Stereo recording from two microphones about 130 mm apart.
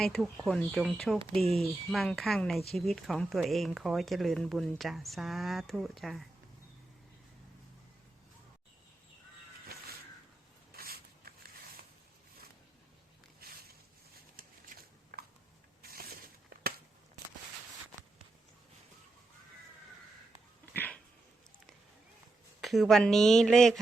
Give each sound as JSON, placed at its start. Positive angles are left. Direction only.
{"t": 0.0, "sound": "speech", "side_deg": 0}
{"t": 14.4, "sound": "a sound", "side_deg": -90}
{"t": 20.7, "sound": "dog", "side_deg": 15}
{"t": 22.6, "sound": "speech", "side_deg": 0}